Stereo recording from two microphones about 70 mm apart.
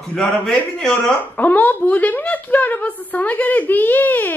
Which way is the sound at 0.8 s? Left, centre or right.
Centre.